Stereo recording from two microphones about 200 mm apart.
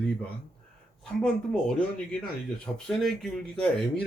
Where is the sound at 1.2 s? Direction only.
5° left (ahead or behind).